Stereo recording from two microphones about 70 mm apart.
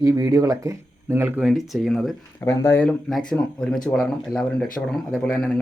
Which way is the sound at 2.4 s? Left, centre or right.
Left.